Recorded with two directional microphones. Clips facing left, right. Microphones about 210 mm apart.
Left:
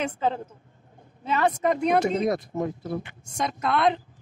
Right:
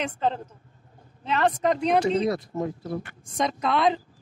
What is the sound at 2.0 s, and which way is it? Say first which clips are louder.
Speech: right 1 dB; 45° left (ahead or behind).